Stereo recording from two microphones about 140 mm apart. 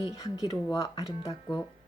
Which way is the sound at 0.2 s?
25° left (ahead or behind).